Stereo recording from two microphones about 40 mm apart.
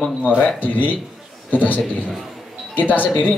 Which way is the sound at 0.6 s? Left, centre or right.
Left.